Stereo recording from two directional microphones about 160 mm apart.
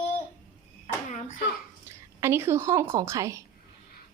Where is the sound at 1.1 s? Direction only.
55° left (ahead or behind).